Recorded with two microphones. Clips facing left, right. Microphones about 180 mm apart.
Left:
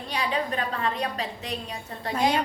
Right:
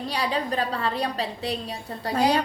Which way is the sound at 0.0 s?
35° right (ahead or behind).